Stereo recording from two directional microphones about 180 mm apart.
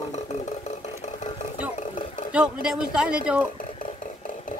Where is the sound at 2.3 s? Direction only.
5° right (ahead or behind).